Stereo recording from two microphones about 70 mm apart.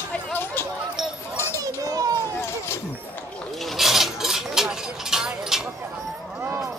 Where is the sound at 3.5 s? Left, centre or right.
Centre.